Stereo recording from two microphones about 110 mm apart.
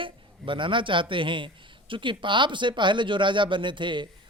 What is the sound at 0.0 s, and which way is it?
Speech, 50° right (ahead or behind).